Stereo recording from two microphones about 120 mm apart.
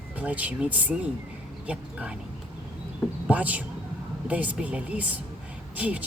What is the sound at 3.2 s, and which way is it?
Speech, 10° right (ahead or behind).